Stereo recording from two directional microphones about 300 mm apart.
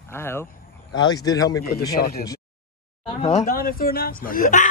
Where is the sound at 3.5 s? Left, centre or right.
Left.